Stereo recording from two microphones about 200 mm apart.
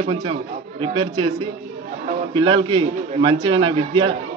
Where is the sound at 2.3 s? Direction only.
25° right (ahead or behind).